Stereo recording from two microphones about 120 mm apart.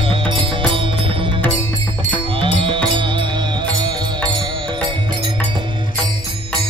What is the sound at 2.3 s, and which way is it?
Music, 45° right (ahead or behind).